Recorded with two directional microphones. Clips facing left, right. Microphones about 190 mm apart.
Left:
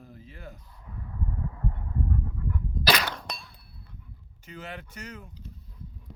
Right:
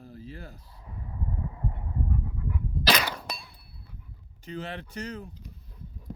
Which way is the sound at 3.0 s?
5° right (ahead or behind).